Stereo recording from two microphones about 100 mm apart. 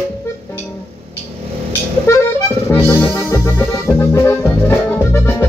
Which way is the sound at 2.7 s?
20° left (ahead or behind).